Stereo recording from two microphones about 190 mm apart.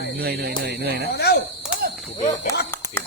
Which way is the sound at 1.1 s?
60° left (ahead or behind).